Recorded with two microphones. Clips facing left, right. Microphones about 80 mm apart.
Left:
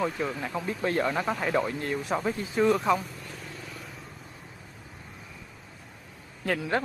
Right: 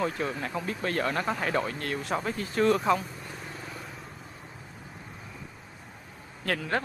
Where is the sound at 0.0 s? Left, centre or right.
Centre.